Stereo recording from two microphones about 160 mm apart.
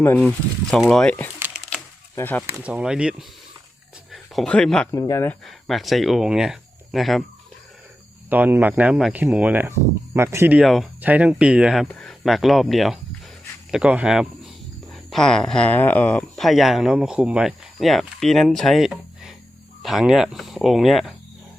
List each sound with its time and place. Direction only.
0.0 s speech: 15° left (ahead or behind)
0.3 s speech: centre (ahead or behind)
1.7 s a sound: 10° left (ahead or behind)
2.5 s speech: 10° right (ahead or behind)
4.9 s speech: 20° left (ahead or behind)
5.5 s speech: centre (ahead or behind)
8.3 s speech: 10° right (ahead or behind)
10.6 s speech: centre (ahead or behind)